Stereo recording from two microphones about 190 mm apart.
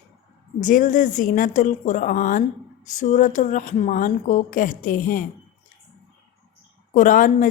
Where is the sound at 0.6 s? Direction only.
45° left (ahead or behind).